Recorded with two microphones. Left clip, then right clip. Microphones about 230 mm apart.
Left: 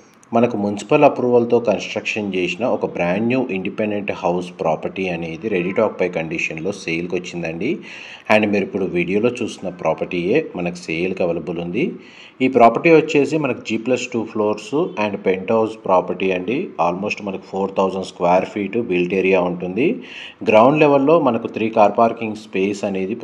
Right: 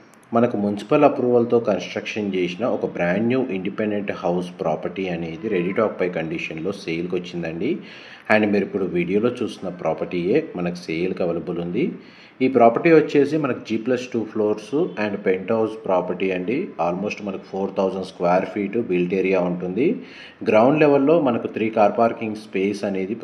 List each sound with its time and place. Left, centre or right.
0.6 s a man's voice: left